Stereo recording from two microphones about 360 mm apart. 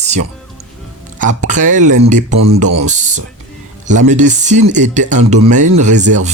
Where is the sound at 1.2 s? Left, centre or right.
Right.